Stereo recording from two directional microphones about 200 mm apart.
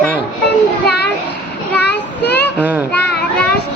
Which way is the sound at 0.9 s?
55° left (ahead or behind).